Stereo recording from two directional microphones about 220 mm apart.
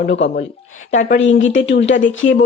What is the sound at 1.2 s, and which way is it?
Speech, 60° left (ahead or behind).